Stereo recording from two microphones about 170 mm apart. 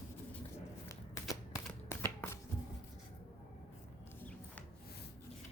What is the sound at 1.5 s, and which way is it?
Shuffling cards, 10° left (ahead or behind).